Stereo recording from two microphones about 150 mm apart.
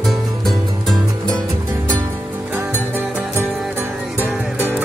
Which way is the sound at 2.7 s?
15° left (ahead or behind).